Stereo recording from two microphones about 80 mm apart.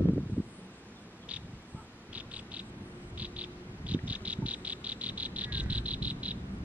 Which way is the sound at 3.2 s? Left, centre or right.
Centre.